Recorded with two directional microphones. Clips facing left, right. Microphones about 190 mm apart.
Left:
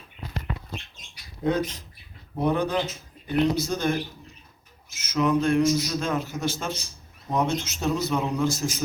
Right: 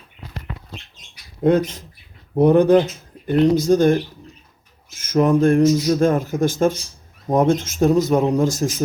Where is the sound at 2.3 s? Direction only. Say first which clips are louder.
Right 12 dB; 50° right (ahead or behind).